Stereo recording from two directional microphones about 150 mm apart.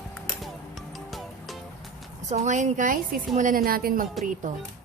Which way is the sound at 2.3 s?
50° right (ahead or behind).